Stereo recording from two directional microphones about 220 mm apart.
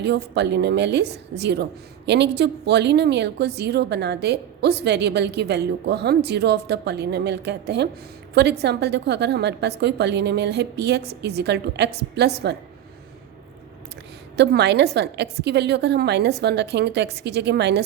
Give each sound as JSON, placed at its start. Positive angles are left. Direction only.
{"t": 0.0, "sound": "a woman's voice", "side_deg": -50}
{"t": 14.3, "sound": "a woman's voice", "side_deg": -50}